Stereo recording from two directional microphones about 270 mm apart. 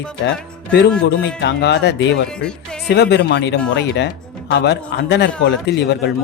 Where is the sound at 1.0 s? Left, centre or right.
Left.